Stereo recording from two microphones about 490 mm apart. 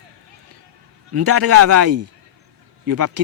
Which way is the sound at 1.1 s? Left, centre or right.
Right.